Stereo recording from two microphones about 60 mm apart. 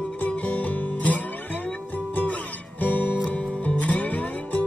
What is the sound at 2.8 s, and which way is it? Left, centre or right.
Music, left.